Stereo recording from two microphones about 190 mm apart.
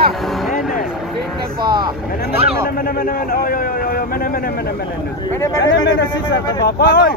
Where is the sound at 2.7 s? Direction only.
45° left (ahead or behind).